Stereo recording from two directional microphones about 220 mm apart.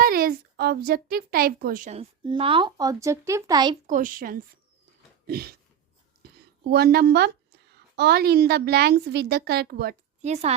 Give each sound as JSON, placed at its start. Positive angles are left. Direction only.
{"t": 0.0, "sound": "a child's voice", "side_deg": -40}
{"t": 3.8, "sound": "a child's voice", "side_deg": -35}
{"t": 5.2, "sound": "a sound", "side_deg": -45}
{"t": 6.7, "sound": "a woman's voice", "side_deg": -45}
{"t": 10.2, "sound": "a woman's voice", "side_deg": -30}